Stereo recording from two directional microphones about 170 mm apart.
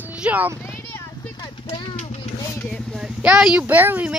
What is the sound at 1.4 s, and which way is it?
Clip-clop, 25° left (ahead or behind).